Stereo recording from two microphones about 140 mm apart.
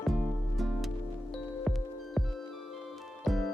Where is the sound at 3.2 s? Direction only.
Centre (ahead or behind).